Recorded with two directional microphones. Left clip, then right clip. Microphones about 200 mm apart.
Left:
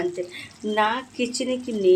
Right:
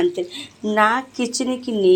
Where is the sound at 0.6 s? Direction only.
15° right (ahead or behind).